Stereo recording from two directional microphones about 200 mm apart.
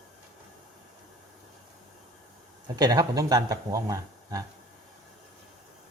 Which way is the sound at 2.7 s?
20° right (ahead or behind).